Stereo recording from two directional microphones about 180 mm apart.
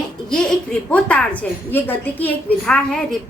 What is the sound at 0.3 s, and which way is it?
A woman's voice, 5° left (ahead or behind).